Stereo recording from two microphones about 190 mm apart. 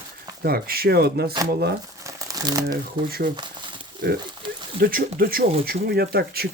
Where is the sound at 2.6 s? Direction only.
50° right (ahead or behind).